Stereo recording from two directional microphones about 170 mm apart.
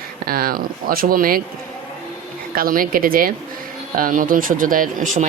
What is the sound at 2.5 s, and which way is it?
A woman's voice, 55° right (ahead or behind).